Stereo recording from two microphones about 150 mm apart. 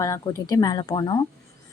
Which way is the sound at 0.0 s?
20° left (ahead or behind).